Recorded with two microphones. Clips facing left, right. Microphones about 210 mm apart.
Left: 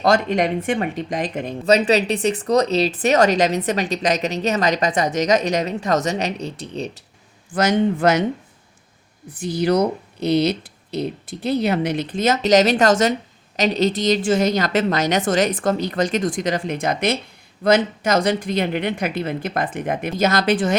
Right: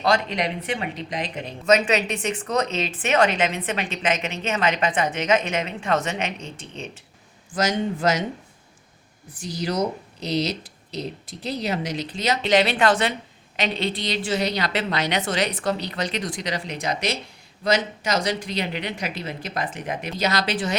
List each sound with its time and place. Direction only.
0.0 s a woman's voice: 50° left (ahead or behind)
1.6 s speech: 35° left (ahead or behind)
7.5 s speech: 60° left (ahead or behind)
9.3 s a woman's voice: 60° left (ahead or behind)